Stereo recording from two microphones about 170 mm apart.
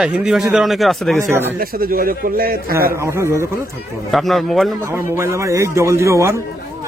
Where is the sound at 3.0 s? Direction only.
15° right (ahead or behind).